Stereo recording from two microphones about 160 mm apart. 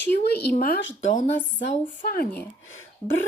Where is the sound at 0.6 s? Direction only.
70° left (ahead or behind).